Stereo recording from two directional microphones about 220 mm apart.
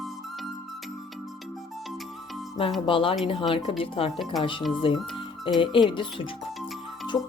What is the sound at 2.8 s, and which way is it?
Speech, 25° left (ahead or behind).